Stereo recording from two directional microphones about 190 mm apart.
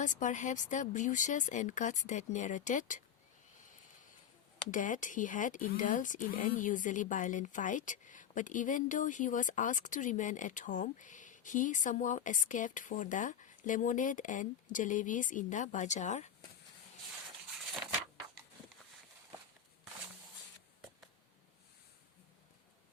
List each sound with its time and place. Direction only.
0.0 s speech: 40° left (ahead or behind)
4.7 s speech: 45° left (ahead or behind)